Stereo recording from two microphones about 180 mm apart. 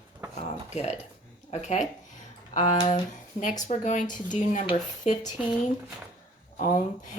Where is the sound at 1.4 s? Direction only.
40° left (ahead or behind).